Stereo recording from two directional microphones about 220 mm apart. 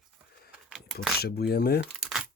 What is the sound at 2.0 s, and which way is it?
Crumpling, centre (ahead or behind).